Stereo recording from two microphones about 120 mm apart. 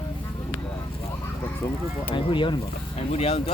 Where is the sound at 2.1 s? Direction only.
45° left (ahead or behind).